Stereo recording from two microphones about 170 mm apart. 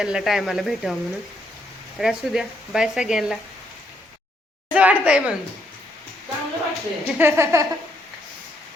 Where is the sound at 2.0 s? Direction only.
Centre (ahead or behind).